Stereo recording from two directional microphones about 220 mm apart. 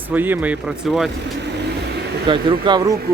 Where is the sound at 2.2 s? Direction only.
20° right (ahead or behind).